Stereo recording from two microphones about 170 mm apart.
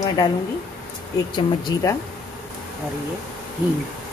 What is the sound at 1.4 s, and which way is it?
Speech, 25° left (ahead or behind).